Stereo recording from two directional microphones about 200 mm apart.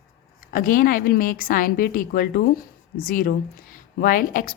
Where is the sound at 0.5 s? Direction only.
45° left (ahead or behind).